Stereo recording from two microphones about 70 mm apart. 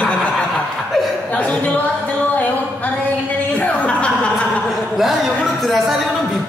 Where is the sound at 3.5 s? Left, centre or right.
Centre.